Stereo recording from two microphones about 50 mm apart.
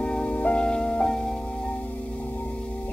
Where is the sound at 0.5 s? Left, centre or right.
Centre.